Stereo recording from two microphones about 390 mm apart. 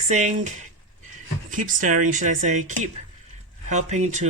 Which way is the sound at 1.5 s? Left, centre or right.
Centre.